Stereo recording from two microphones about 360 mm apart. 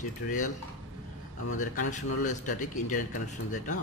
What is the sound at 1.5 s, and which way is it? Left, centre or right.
Speech, left.